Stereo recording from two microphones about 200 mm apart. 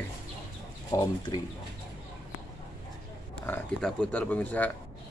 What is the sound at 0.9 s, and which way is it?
Speech, 20° left (ahead or behind).